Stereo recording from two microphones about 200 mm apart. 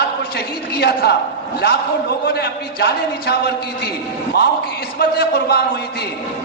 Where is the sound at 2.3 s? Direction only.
55° left (ahead or behind).